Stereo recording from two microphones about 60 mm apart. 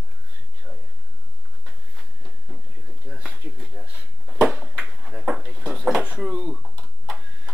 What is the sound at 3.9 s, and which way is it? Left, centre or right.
Drawer open or close, right.